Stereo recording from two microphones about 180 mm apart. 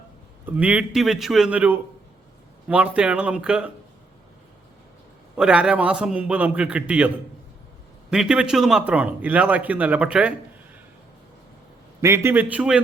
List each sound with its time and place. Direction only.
0.4 s a man's voice: 10° right (ahead or behind)
5.4 s a man's voice: 5° right (ahead or behind)
8.1 s a man's voice: 5° right (ahead or behind)
11.9 s a man's voice: 15° right (ahead or behind)